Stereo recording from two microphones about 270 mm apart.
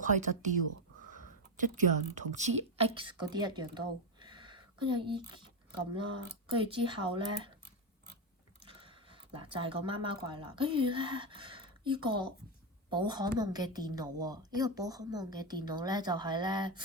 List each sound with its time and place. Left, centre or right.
0.0 s a woman's voice: right
1.6 s a woman's voice: right
3.8 s a sound: centre
5.9 s a woman's voice: centre
8.6 s a sound: centre
10.2 s a woman's voice: centre